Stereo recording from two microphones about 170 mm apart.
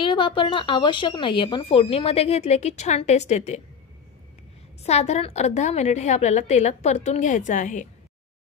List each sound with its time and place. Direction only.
0.0 s speech: 30° left (ahead or behind)
4.8 s speech: 40° left (ahead or behind)